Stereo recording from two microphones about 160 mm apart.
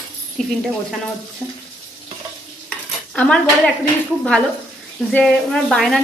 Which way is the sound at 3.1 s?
10° left (ahead or behind).